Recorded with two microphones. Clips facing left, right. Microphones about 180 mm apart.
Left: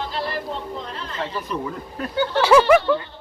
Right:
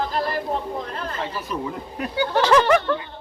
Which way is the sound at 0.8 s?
50° right (ahead or behind).